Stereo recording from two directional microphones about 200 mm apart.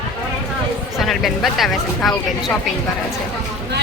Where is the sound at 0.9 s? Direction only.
Centre (ahead or behind).